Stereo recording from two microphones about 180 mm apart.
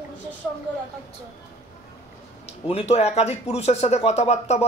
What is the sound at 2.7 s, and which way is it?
Speech, 35° left (ahead or behind).